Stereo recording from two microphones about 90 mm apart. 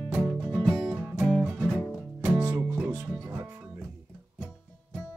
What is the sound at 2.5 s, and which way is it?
Music, 20° right (ahead or behind).